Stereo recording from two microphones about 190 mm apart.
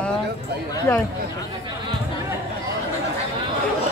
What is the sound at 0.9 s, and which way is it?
Speech, 15° left (ahead or behind).